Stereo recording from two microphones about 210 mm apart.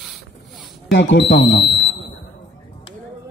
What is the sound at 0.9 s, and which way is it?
Speech, 55° left (ahead or behind).